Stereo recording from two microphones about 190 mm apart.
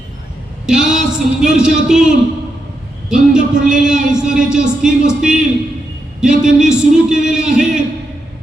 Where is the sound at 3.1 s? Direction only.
5° right (ahead or behind).